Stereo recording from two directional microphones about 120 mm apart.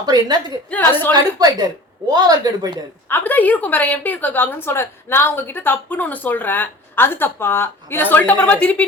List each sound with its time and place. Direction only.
0.0 s speech: 35° right (ahead or behind)
0.7 s a woman's voice: 15° left (ahead or behind)
1.1 s speech: 35° right (ahead or behind)
3.1 s a woman's voice: 15° left (ahead or behind)